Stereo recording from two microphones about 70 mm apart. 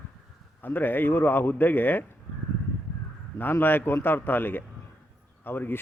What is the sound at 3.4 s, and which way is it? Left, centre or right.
Speech, left.